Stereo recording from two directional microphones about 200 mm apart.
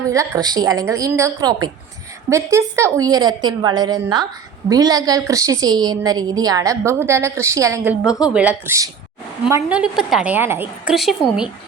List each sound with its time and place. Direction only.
0.1 s a woman's voice: 15° right (ahead or behind)
8.0 s a woman's voice: 5° right (ahead or behind)